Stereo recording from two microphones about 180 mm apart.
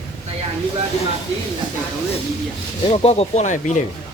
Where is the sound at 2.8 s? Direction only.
35° left (ahead or behind).